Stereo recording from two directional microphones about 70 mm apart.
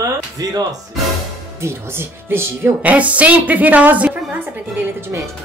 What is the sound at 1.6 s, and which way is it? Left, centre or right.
Speech, right.